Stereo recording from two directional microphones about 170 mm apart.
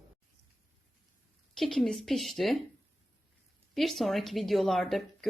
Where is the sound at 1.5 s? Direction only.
Centre (ahead or behind).